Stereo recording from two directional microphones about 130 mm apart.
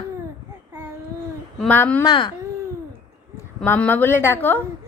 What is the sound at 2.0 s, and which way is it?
Speech, 35° left (ahead or behind).